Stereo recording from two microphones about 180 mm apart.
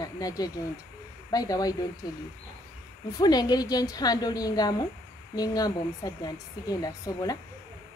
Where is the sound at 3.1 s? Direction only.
20° left (ahead or behind).